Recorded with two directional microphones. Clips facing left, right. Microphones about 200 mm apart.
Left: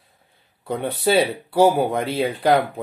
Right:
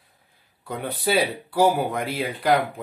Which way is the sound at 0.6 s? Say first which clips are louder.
Left 5 dB; 25° left (ahead or behind).